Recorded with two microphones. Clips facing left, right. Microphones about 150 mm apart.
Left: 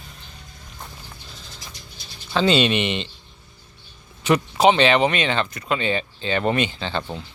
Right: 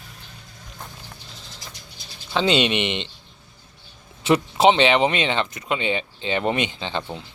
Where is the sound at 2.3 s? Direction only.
20° right (ahead or behind).